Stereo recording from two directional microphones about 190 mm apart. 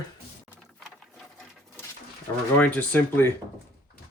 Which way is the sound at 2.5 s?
10° left (ahead or behind).